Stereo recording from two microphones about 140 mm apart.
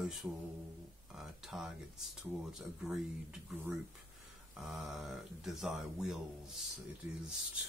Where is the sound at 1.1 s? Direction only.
Centre (ahead or behind).